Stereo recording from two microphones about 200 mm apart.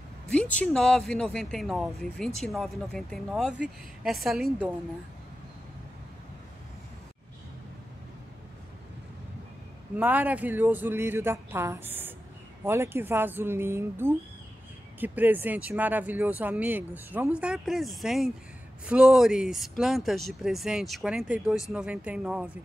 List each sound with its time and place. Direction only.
0.3 s speech: 5° left (ahead or behind)
9.9 s speech: 10° right (ahead or behind)